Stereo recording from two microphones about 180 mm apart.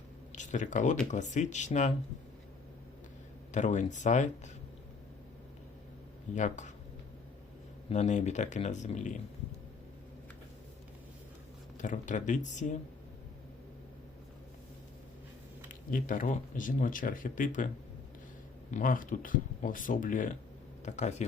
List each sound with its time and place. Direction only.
0.3 s speech: 45° left (ahead or behind)
3.5 s speech: 40° left (ahead or behind)
6.3 s speech: 45° left (ahead or behind)
7.9 s speech: 40° left (ahead or behind)
11.8 s speech: 45° left (ahead or behind)
15.7 s speech: 50° left (ahead or behind)
18.7 s speech: 50° left (ahead or behind)